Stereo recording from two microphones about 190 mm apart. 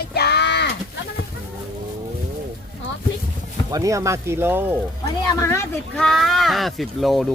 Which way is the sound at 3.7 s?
20° right (ahead or behind).